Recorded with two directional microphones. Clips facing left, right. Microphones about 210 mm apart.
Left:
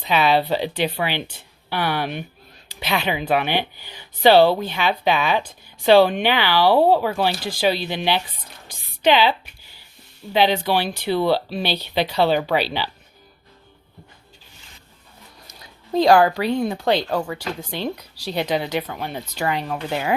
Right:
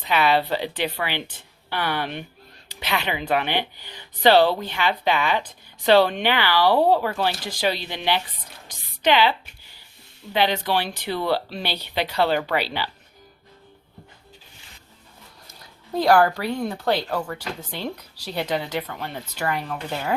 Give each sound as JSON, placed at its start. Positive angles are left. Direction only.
{"t": 0.1, "sound": "speech", "side_deg": 15}
{"t": 8.6, "sound": "a sound", "side_deg": 10}
{"t": 10.3, "sound": "speech", "side_deg": 10}
{"t": 11.7, "sound": "speech", "side_deg": -10}
{"t": 12.0, "sound": "speech", "side_deg": 15}
{"t": 15.4, "sound": "speech", "side_deg": 20}